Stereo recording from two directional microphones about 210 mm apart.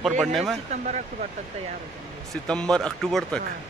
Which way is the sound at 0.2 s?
Centre (ahead or behind).